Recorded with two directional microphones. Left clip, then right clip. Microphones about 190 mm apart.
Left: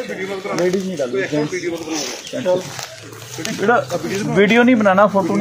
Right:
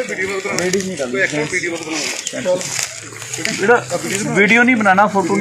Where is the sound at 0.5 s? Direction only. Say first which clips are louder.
Left 4 dB; 35° left (ahead or behind).